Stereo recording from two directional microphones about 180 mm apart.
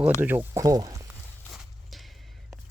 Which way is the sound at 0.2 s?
10° right (ahead or behind).